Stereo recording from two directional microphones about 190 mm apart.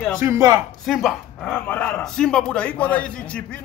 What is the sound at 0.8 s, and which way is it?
A man's voice, centre (ahead or behind).